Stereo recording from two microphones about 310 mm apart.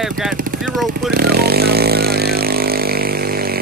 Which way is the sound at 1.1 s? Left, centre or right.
Right.